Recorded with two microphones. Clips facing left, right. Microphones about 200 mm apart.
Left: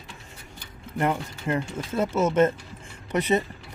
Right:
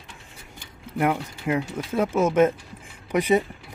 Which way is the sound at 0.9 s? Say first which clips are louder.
Right 2 dB; 10° right (ahead or behind).